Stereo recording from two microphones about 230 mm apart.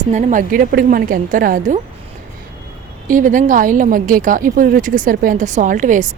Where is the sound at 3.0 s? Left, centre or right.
Right.